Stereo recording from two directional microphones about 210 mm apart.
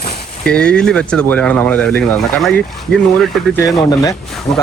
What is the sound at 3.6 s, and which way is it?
Speech, 15° left (ahead or behind).